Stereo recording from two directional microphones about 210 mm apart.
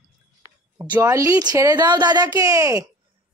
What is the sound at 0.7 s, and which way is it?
A woman's voice, 15° right (ahead or behind).